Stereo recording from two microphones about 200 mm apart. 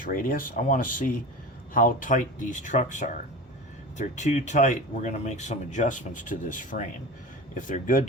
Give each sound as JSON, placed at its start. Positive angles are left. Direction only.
{"t": 0.0, "sound": "speech", "side_deg": 45}